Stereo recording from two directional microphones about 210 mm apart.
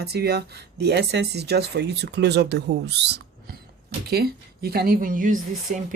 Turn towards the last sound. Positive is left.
turn(degrees=-35)  # may be behind; listen again after turning